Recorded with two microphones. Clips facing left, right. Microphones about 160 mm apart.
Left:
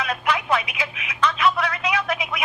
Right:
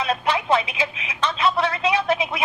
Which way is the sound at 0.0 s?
30° right (ahead or behind).